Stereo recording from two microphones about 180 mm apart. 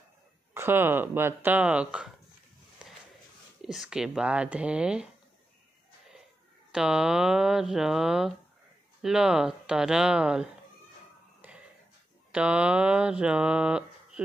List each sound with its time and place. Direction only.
0.6 s speech: 10° right (ahead or behind)
3.6 s speech: centre (ahead or behind)
6.7 s speech: 5° right (ahead or behind)
11.4 s a sound: 10° right (ahead or behind)
12.3 s speech: 5° right (ahead or behind)